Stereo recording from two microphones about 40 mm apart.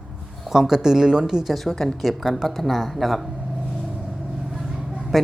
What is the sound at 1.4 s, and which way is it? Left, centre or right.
Speech, centre.